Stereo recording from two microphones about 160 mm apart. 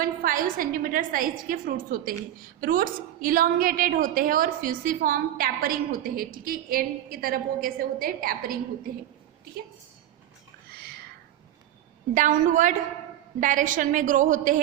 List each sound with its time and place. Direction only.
0.0 s a woman's voice: 60° right (ahead or behind)
12.1 s a woman's voice: 55° right (ahead or behind)